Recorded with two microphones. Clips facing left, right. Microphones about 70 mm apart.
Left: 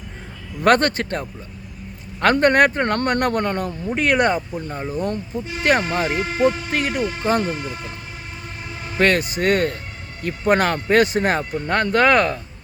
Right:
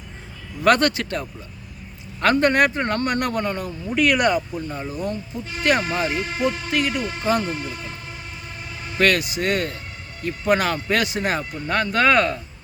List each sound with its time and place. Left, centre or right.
0.6 s speech: left
2.2 s a man's voice: left
3.9 s speech: left
9.0 s a man's voice: left
11.9 s speech: centre